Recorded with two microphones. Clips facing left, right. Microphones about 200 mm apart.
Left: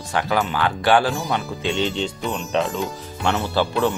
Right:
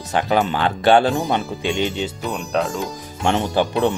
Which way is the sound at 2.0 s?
5° right (ahead or behind).